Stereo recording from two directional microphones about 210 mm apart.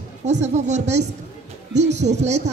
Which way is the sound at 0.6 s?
35° right (ahead or behind).